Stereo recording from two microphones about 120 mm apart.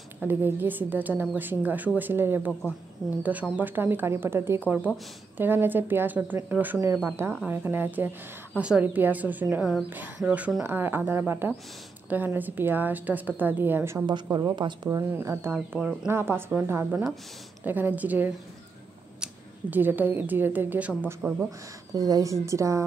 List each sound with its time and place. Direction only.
0.2 s a woman's voice: 15° right (ahead or behind)
14.3 s speech: 40° right (ahead or behind)
15.1 s speech: 20° right (ahead or behind)
15.5 s a woman's voice: 5° right (ahead or behind)
16.1 s a woman's voice: 20° right (ahead or behind)
21.5 s speech: 30° right (ahead or behind)